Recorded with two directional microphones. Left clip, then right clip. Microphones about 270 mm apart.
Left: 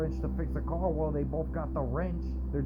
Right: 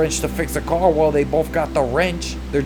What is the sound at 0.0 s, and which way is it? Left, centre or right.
Speech, right.